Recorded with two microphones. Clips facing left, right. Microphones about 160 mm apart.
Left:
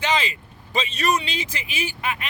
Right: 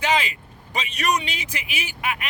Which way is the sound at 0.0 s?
10° right (ahead or behind).